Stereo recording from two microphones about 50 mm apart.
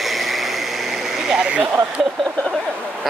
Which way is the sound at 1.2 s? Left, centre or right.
Centre.